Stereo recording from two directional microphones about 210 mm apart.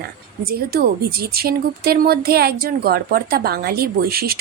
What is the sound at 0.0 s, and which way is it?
A woman's voice, 45° right (ahead or behind).